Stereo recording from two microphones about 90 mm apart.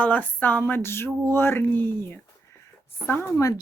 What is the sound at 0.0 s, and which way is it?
Speech, 15° left (ahead or behind).